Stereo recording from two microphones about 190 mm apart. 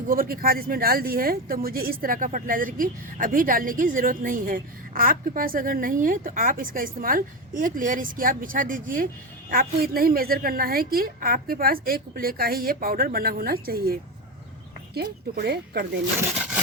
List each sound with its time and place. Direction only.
0.1 s speech: 50° right (ahead or behind)